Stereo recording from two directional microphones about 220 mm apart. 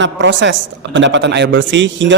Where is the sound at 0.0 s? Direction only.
55° right (ahead or behind).